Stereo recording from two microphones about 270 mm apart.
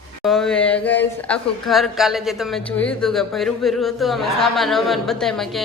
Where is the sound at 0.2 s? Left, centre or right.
Centre.